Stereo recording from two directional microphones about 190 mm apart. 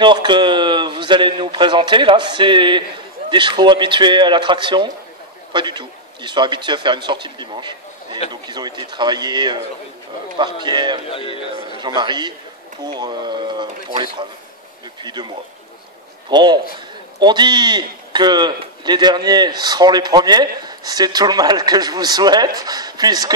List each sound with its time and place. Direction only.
0.0 s a man's voice: 25° right (ahead or behind)
11.1 s a man's voice: 30° left (ahead or behind)
11.5 s a man's voice: 25° right (ahead or behind)
15.0 s a man's voice: 25° right (ahead or behind)